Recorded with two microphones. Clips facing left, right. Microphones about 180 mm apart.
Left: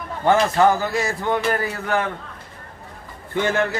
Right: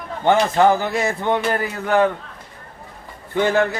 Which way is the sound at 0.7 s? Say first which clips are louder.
Right 2 dB; 20° right (ahead or behind).